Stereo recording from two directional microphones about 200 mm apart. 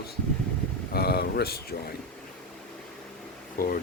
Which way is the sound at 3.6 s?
45° left (ahead or behind).